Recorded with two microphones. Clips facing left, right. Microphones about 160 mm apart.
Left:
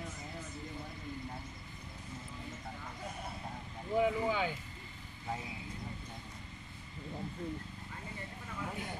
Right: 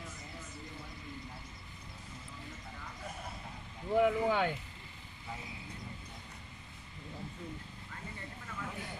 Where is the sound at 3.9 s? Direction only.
65° right (ahead or behind).